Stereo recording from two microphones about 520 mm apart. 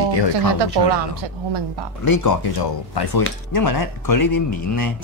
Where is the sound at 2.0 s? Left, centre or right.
Left.